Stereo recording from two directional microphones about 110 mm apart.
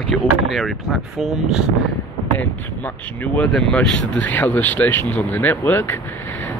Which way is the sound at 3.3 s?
10° left (ahead or behind).